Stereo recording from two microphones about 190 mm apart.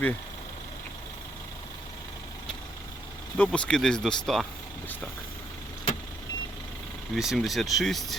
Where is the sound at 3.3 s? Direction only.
5° left (ahead or behind).